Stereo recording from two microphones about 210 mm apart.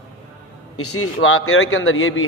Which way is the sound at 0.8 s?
90° left.